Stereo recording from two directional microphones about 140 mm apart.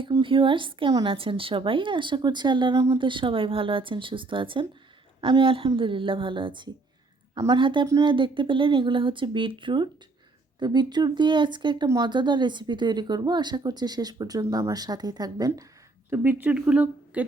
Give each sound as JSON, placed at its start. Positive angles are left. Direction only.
{"t": 0.0, "sound": "a woman's voice", "side_deg": -35}
{"t": 16.0, "sound": "speech", "side_deg": -15}